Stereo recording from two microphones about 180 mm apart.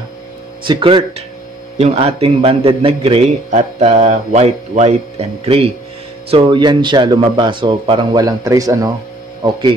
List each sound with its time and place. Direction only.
0.7 s a man's voice: 25° right (ahead or behind)